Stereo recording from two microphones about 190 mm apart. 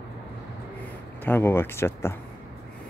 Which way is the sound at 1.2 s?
10° left (ahead or behind).